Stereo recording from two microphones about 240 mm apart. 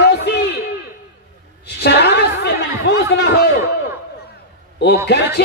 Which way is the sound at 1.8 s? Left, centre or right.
Left.